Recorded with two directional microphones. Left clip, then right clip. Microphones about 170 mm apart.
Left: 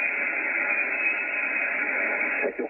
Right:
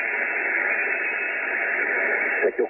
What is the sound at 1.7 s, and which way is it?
Radio, 20° right (ahead or behind).